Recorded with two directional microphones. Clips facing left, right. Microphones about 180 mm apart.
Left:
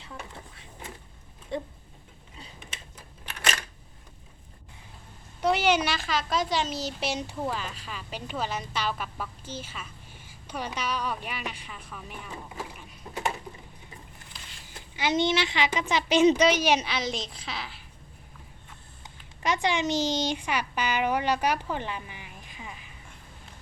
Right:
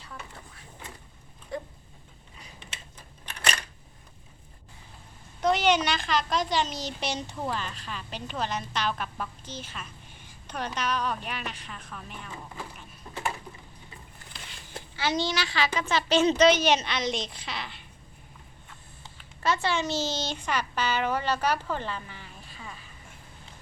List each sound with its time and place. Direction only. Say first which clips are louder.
1.5 s a sound: left 3 dB; 25° left (ahead or behind)
5.4 s a woman's voice: even; 10° left (ahead or behind)
14.9 s a woman's voice: left 3 dB; 20° left (ahead or behind); by 17.8 s 5° left (ahead or behind)
19.0 s speech: right 1 dB; 15° left (ahead or behind)